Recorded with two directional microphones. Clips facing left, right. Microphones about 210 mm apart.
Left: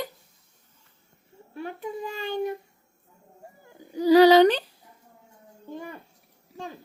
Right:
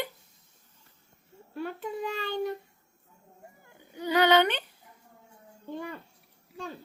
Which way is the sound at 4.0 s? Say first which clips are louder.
Left 8 dB; 35° left (ahead or behind).